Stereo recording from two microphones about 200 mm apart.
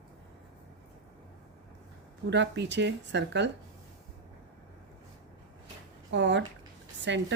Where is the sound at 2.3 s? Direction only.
60° right (ahead or behind).